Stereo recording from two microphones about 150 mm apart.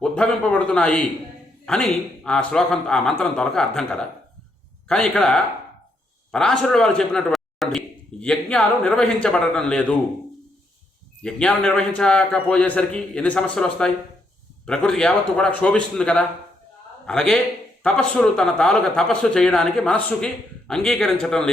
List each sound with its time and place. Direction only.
0.0 s a man's voice: 5° left (ahead or behind)
11.2 s a man's voice: 5° left (ahead or behind)